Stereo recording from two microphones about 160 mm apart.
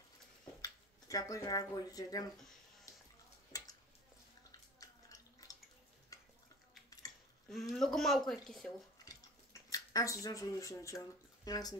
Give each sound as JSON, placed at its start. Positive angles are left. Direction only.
{"t": 0.6, "sound": "speech", "side_deg": 20}
{"t": 4.5, "sound": "a sound", "side_deg": 20}
{"t": 7.4, "sound": "speech", "side_deg": 0}
{"t": 9.0, "sound": "chewing", "side_deg": 20}
{"t": 10.2, "sound": "speech", "side_deg": 20}